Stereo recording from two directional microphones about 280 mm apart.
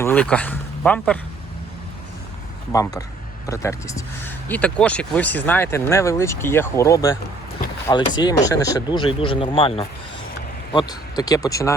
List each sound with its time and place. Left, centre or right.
0.0 s speech: centre
2.7 s speech: centre